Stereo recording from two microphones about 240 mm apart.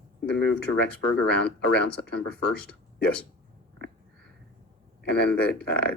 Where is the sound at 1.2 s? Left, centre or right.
Left.